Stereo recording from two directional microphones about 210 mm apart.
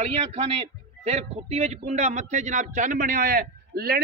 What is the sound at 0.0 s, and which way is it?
A man's voice, 30° right (ahead or behind).